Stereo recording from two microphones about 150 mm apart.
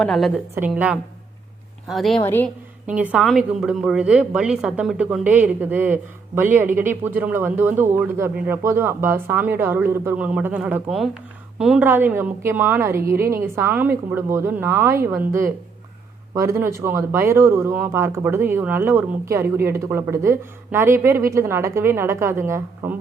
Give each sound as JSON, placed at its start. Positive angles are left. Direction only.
{"t": 0.0, "sound": "a woman's voice", "side_deg": 0}
{"t": 0.7, "sound": "a woman's voice", "side_deg": -10}
{"t": 2.2, "sound": "a woman's voice", "side_deg": 15}
{"t": 2.8, "sound": "a woman's voice", "side_deg": -10}